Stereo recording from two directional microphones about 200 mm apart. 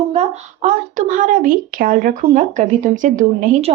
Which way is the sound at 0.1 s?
35° right (ahead or behind).